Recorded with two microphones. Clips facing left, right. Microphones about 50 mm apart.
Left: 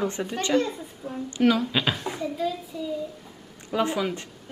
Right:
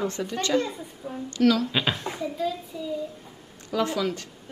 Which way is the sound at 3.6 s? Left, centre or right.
Left.